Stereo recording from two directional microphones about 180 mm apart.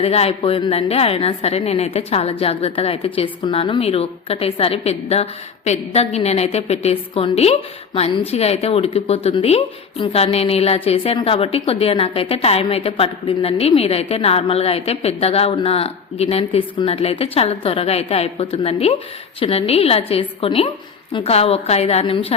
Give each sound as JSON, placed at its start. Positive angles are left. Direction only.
{"t": 0.0, "sound": "a woman's voice", "side_deg": 35}